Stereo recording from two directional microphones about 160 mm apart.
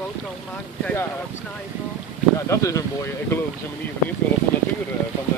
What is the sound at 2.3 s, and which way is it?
Speech, 20° left (ahead or behind).